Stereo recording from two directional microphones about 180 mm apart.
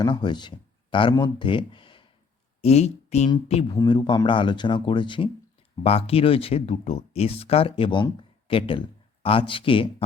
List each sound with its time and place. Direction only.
0.0 s speech: 25° left (ahead or behind)